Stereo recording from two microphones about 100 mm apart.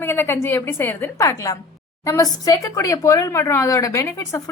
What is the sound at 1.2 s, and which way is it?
A woman's voice, 35° left (ahead or behind).